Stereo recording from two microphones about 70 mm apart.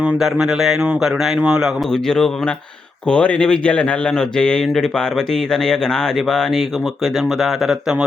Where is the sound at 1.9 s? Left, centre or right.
Centre.